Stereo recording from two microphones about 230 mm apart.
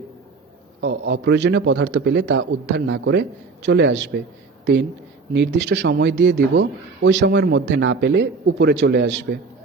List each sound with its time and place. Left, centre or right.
0.8 s a man's voice: right